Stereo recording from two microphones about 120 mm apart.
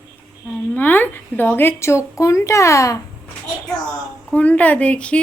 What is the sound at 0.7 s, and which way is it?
A woman's voice, 15° left (ahead or behind).